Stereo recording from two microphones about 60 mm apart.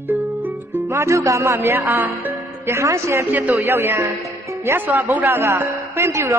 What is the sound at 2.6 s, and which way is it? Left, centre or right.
Speech, right.